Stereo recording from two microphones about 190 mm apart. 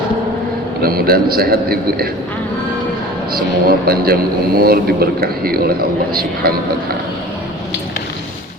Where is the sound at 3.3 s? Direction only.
55° right (ahead or behind).